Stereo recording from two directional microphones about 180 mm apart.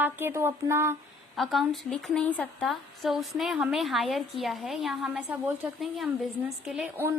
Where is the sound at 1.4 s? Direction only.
Centre (ahead or behind).